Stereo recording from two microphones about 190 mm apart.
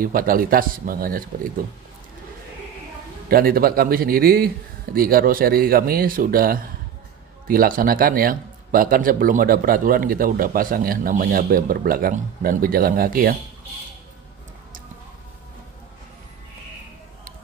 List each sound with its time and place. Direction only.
0.0 s a man's voice: 50° right (ahead or behind)
3.3 s a man's voice: 50° right (ahead or behind)